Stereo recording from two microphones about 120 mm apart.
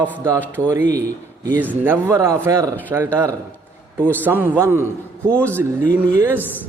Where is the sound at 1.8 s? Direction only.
20° right (ahead or behind).